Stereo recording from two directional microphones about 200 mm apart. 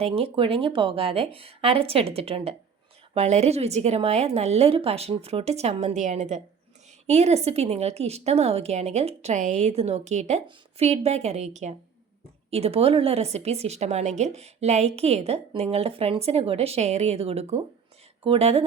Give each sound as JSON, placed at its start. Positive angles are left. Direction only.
{"t": 0.0, "sound": "speech", "side_deg": -25}